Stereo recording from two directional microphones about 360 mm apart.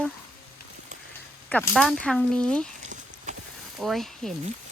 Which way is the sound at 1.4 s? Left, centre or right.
Centre.